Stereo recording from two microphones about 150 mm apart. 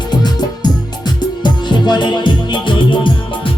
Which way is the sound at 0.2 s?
30° left (ahead or behind).